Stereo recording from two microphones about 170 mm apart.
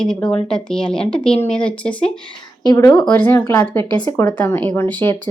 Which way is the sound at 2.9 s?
5° left (ahead or behind).